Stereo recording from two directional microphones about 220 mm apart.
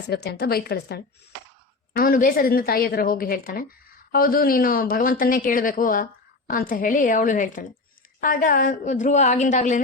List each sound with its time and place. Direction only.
0.1 s a woman's voice: 45° left (ahead or behind)